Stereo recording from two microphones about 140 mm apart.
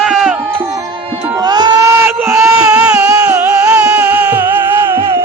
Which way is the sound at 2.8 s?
25° right (ahead or behind).